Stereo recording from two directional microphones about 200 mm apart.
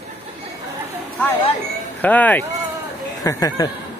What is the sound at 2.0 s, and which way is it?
Speech, 10° left (ahead or behind).